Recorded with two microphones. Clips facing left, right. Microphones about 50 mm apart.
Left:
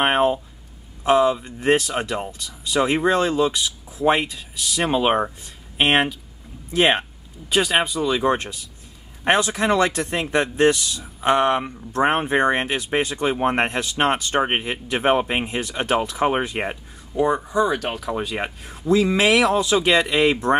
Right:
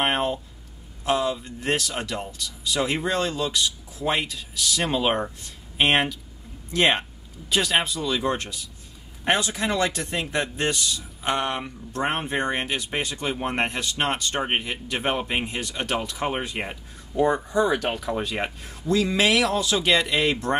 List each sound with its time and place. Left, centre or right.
0.0 s a sound: centre
1.0 s speech: centre
17.1 s speech: centre